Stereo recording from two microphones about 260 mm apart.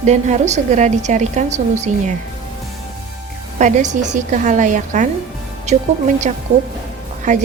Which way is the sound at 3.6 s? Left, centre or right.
Right.